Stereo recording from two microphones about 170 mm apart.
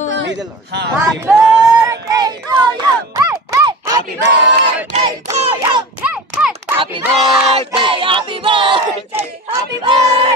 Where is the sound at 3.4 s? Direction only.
20° right (ahead or behind).